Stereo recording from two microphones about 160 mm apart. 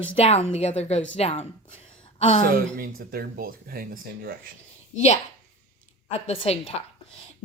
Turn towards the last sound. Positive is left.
turn(degrees=40)  # may be behind; listen again after turning